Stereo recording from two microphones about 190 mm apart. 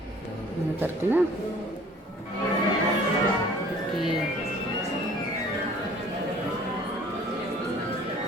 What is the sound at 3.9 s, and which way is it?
Speech, centre (ahead or behind).